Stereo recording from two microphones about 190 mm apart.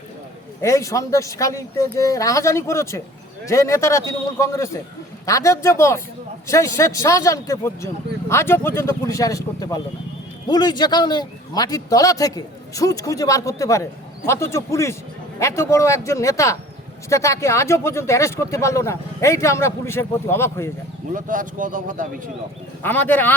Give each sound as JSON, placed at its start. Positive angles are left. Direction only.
{"t": 0.6, "sound": "a man's voice", "side_deg": 15}
{"t": 21.1, "sound": "speech", "side_deg": -45}
{"t": 22.8, "sound": "speech", "side_deg": 10}